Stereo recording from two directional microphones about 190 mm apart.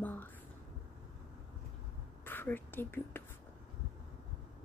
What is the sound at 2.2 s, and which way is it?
Speech, 10° left (ahead or behind).